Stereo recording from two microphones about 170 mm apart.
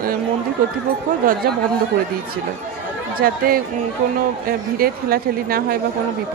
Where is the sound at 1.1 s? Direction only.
50° right (ahead or behind).